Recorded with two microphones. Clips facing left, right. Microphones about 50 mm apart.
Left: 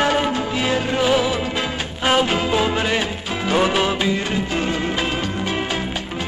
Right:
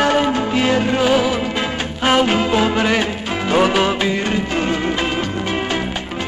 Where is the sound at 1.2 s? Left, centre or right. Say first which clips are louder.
Right 3 dB; right.